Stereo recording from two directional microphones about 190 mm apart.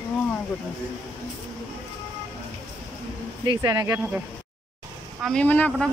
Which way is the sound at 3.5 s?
20° right (ahead or behind).